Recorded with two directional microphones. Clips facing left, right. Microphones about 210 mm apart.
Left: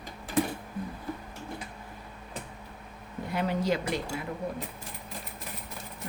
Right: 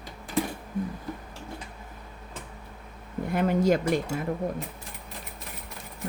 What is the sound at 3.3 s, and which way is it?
Speech, 50° right (ahead or behind).